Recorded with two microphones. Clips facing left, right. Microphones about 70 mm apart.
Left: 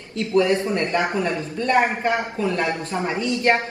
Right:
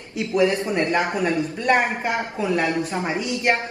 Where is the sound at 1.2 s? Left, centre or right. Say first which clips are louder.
Right 2 dB; centre.